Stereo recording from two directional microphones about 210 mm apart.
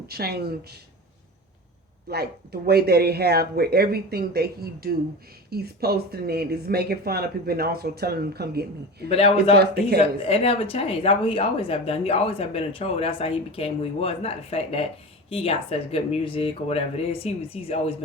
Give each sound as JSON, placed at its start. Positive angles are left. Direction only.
{"t": 0.1, "sound": "speech", "side_deg": -50}
{"t": 2.0, "sound": "speech", "side_deg": -50}
{"t": 9.0, "sound": "a woman's voice", "side_deg": 30}